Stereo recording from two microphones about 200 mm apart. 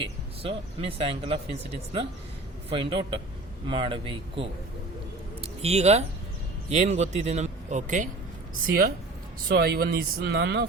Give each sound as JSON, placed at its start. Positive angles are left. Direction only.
{"t": 0.0, "sound": "a man's voice", "side_deg": -30}